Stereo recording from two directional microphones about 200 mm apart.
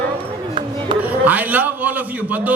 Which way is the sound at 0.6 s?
25° right (ahead or behind).